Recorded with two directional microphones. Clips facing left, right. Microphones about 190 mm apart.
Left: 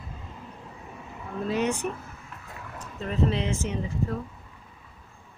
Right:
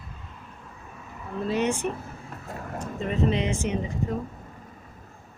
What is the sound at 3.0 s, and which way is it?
Speech, centre (ahead or behind).